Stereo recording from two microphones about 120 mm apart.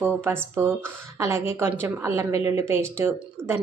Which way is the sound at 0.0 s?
20° right (ahead or behind).